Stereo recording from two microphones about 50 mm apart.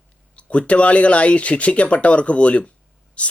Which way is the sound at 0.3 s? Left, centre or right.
Left.